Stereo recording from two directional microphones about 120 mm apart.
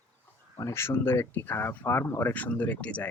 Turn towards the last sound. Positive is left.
turn(degrees=10)  # may be behind; listen again after turning